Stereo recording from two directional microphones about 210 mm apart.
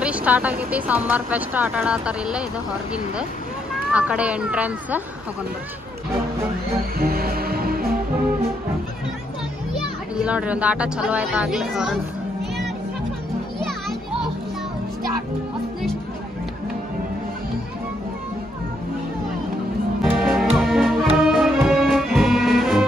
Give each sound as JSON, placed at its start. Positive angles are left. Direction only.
{"t": 0.0, "sound": "speech", "side_deg": -5}
{"t": 3.9, "sound": "speech", "side_deg": -5}
{"t": 7.0, "sound": "music", "side_deg": -45}
{"t": 10.1, "sound": "speech", "side_deg": -5}
{"t": 13.6, "sound": "music", "side_deg": 0}
{"t": 20.0, "sound": "music", "side_deg": 0}